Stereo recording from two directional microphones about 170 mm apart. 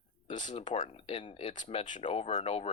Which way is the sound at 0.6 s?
35° left (ahead or behind).